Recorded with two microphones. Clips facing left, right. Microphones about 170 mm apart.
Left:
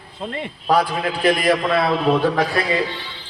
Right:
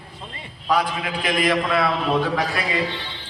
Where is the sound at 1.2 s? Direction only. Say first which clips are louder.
Left 4 dB; 40° left (ahead or behind).